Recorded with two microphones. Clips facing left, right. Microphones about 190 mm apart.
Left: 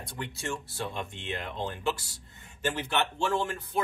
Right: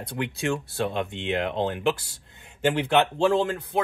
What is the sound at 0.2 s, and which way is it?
Speech, 80° right.